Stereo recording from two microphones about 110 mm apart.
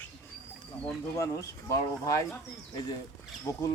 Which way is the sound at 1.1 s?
30° left (ahead or behind).